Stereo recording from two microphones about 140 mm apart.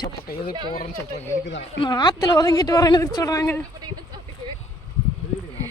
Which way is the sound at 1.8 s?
30° left (ahead or behind).